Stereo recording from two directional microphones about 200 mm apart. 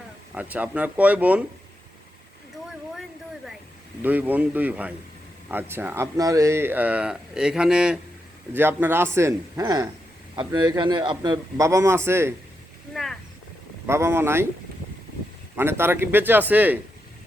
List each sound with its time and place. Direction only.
0.3 s speech: 10° right (ahead or behind)
4.0 s a man's voice: 10° right (ahead or behind)
12.9 s a sound: centre (ahead or behind)
13.8 s speech: 15° right (ahead or behind)
15.5 s speech: 10° right (ahead or behind)